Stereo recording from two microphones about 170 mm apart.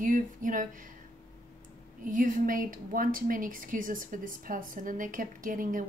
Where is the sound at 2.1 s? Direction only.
50° right (ahead or behind).